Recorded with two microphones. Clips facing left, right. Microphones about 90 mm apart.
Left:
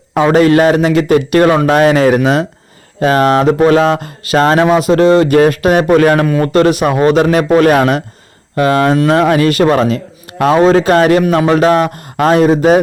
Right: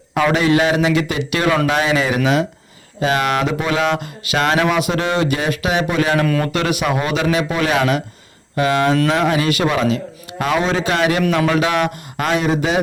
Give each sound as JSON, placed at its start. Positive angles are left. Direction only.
{"t": 0.3, "sound": "speech", "side_deg": 45}